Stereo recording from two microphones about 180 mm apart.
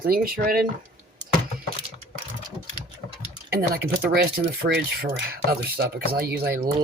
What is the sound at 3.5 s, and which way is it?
Speech, 55° right (ahead or behind).